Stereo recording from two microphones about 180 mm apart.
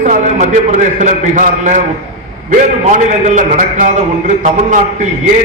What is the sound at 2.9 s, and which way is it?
A man's voice, 45° right (ahead or behind).